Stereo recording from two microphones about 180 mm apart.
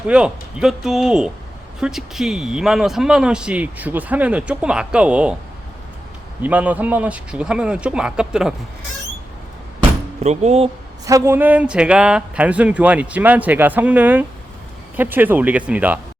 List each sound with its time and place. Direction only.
0.1 s a man's voice: 5° right (ahead or behind)
6.4 s a man's voice: 10° right (ahead or behind)
10.2 s speech: 35° right (ahead or behind)
11.0 s a man's voice: 15° right (ahead or behind)